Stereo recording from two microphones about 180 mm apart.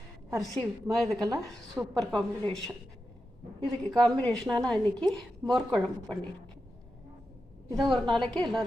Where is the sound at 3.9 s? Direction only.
Centre (ahead or behind).